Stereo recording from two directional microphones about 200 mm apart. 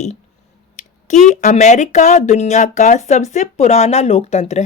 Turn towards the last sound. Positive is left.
turn(degrees=35)  # may be behind; listen again after turning